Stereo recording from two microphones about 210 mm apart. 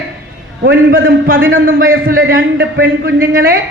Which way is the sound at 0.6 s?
50° right (ahead or behind).